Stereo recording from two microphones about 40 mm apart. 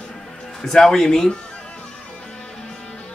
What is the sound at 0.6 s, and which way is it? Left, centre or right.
Speech, centre.